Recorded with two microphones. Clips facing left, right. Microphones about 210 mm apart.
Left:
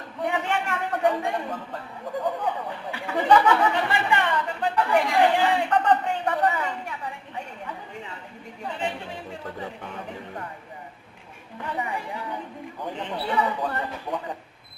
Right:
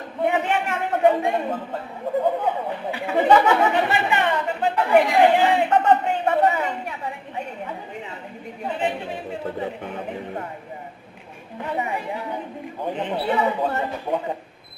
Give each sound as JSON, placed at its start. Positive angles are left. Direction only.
{"t": 0.2, "sound": "a sound", "side_deg": -20}
{"t": 8.6, "sound": "chatter", "side_deg": -20}
{"t": 11.6, "sound": "a man's voice", "side_deg": -20}